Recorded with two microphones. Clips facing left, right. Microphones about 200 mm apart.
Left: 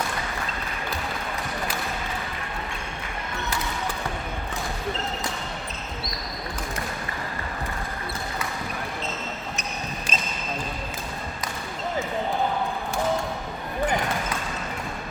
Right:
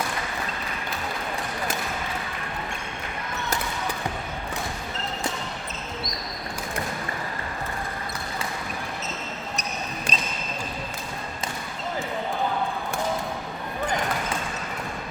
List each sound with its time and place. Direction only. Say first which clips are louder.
10.1 s basketball bounce: even; 35° right (ahead or behind)